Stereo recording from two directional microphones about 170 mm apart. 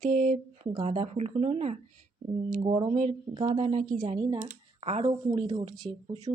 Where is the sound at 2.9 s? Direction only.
45° right (ahead or behind).